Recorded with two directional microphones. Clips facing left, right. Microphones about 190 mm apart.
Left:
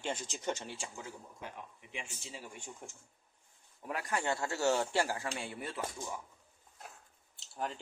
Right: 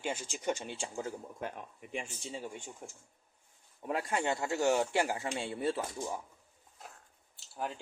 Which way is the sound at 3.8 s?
25° right (ahead or behind).